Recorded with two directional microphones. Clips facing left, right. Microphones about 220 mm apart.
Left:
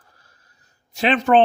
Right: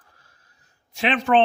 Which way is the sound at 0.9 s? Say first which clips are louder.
Left 3 dB; 40° left (ahead or behind).